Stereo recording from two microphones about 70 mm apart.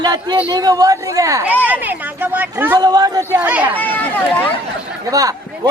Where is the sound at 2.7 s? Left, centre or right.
Right.